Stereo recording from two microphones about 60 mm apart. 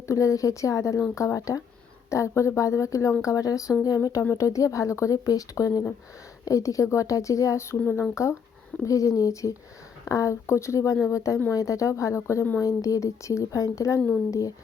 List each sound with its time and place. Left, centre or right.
0.1 s speech: left
2.0 s speech: left
3.2 s speech: left
3.8 s speech: left
4.2 s speech: left
12.5 s speech: left